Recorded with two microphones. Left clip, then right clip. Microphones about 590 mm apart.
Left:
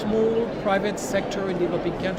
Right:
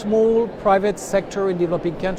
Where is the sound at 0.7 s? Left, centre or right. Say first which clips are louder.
Right 7 dB; right.